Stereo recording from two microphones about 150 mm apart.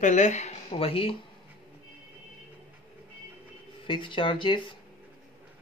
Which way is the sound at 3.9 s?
35° left (ahead or behind).